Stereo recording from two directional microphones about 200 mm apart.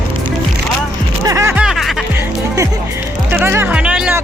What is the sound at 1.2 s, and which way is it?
Music, 15° right (ahead or behind).